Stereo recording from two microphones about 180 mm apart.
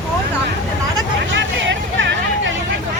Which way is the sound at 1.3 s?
90° right.